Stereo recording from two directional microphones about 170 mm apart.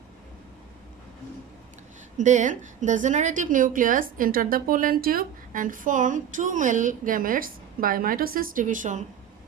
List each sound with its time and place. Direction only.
2.1 s a woman's voice: 45° right (ahead or behind)